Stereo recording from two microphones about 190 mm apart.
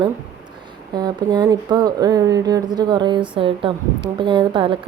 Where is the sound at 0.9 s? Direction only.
20° right (ahead or behind).